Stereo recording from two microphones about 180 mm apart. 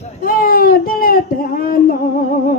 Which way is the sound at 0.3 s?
55° left (ahead or behind).